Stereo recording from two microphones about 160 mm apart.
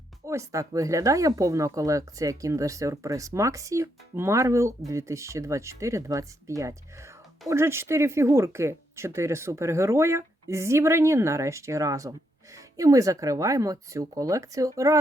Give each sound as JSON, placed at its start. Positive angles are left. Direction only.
{"t": 0.3, "sound": "speech", "side_deg": -20}